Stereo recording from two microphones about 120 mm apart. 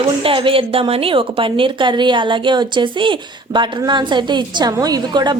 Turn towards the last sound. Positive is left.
turn(degrees=-35)  # may be behind; listen again after turning